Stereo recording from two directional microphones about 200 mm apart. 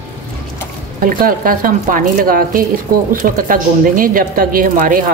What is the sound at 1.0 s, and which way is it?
A woman's voice, 45° right (ahead or behind).